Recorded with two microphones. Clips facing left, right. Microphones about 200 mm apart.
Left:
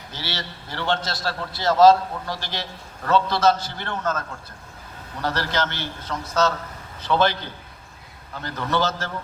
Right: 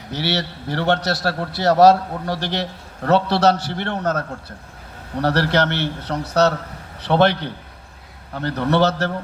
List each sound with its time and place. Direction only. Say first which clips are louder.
0.1 s a man's voice: right 10 dB; 65° right (ahead or behind)